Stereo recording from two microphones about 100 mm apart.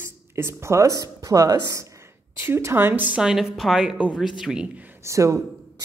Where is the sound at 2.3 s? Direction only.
25° right (ahead or behind).